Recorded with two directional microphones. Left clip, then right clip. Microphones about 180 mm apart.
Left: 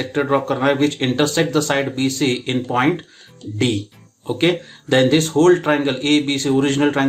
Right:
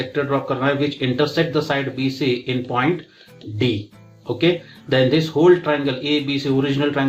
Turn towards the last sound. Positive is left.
turn(degrees=45)  # may be behind; listen again after turning